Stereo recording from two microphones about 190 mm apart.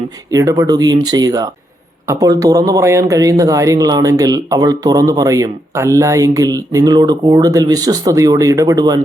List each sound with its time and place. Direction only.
0.3 s speech: 15° right (ahead or behind)